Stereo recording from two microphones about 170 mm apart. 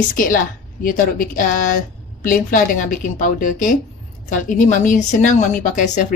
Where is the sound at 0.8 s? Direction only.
55° left (ahead or behind).